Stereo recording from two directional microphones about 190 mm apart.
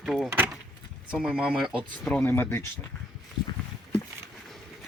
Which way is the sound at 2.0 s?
10° left (ahead or behind).